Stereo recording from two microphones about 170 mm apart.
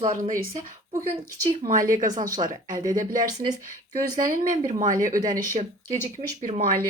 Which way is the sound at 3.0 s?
50° right (ahead or behind).